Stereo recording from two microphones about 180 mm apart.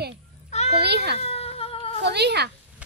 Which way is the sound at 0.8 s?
65° right (ahead or behind).